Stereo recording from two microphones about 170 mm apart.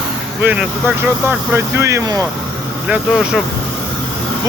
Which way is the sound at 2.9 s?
5° right (ahead or behind).